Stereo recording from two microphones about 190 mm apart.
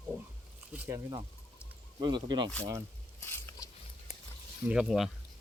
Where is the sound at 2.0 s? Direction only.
25° right (ahead or behind).